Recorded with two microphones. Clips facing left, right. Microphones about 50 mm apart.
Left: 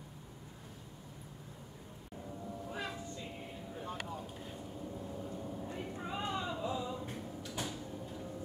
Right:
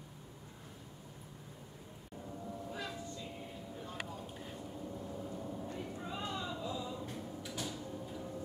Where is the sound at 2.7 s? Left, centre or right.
Left.